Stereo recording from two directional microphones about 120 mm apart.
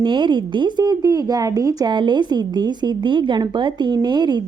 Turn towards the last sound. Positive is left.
turn(degrees=-35)  # may be behind; listen again after turning